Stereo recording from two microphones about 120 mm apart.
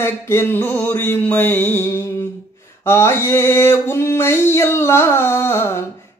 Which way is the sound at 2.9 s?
20° left (ahead or behind).